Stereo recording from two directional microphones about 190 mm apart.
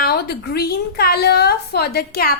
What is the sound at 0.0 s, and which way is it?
A woman's voice, 55° left (ahead or behind).